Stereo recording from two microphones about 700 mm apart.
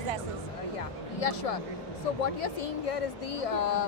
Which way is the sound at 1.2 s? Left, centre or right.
Left.